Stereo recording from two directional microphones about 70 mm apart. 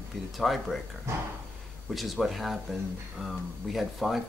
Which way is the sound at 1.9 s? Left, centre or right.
Centre.